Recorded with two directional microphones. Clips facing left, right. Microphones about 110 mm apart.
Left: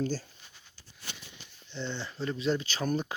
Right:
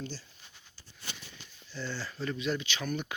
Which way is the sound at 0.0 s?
45° left (ahead or behind).